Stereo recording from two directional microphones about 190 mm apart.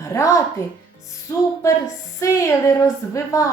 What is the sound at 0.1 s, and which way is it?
A woman's voice, 15° left (ahead or behind).